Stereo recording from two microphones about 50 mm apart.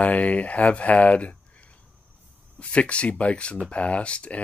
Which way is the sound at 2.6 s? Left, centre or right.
Left.